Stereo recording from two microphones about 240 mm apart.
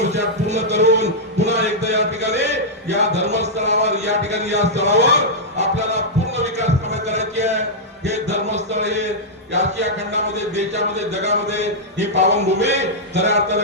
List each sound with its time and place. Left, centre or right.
0.0 s a man's voice: right
5.5 s a sound: right
10.1 s a man's voice: right